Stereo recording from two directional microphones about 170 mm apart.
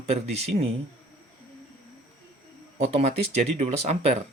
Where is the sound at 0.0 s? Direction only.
40° right (ahead or behind).